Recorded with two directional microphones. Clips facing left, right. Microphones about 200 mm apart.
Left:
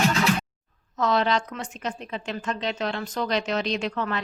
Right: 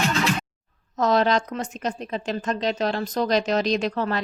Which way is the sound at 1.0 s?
40° right (ahead or behind).